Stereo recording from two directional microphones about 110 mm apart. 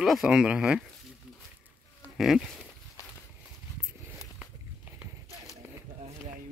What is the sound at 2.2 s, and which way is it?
Livestock, centre (ahead or behind).